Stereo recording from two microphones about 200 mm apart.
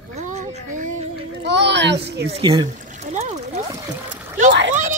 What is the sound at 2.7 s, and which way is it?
Trickle, 40° right (ahead or behind).